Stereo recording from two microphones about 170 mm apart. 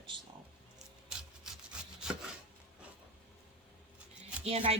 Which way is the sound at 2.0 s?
5° right (ahead or behind).